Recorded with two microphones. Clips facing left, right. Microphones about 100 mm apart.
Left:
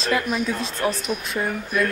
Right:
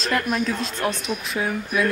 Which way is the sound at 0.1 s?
Centre (ahead or behind).